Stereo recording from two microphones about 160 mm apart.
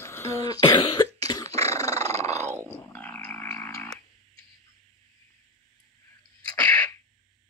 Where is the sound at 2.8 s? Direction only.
10° left (ahead or behind).